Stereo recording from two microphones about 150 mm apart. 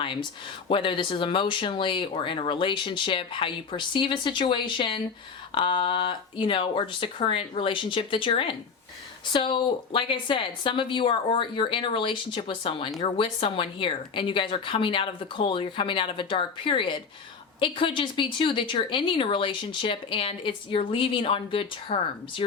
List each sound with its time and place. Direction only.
0.0 s speech: 35° left (ahead or behind)